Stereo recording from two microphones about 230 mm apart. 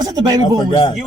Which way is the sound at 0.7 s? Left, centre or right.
Centre.